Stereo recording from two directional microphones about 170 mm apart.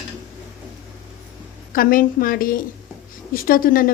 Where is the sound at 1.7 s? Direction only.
55° left (ahead or behind).